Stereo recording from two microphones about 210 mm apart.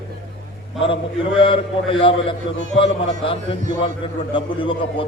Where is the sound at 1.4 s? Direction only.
25° left (ahead or behind).